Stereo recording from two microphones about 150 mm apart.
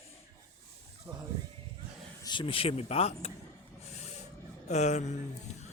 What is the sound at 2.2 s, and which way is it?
Speech, 30° left (ahead or behind).